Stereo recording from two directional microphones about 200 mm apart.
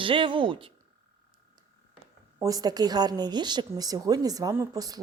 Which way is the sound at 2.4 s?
15° right (ahead or behind).